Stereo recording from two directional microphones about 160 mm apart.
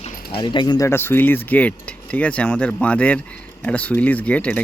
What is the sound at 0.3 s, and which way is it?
Speech, 30° left (ahead or behind).